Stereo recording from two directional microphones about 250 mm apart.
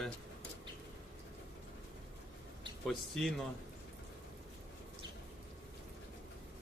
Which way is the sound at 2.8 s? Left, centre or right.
Centre.